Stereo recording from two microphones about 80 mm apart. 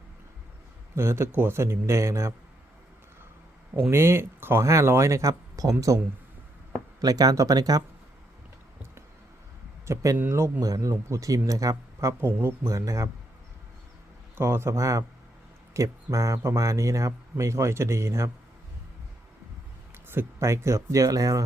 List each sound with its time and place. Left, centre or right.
0.9 s speech: right
3.8 s speech: right
7.0 s speech: right
9.8 s speech: right
14.3 s speech: right
19.9 s speech: right